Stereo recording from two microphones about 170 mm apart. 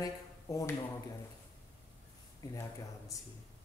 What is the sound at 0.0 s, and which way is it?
Speech, 20° left (ahead or behind).